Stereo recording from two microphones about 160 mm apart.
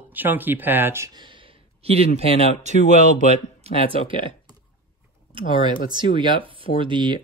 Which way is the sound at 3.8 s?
30° right (ahead or behind).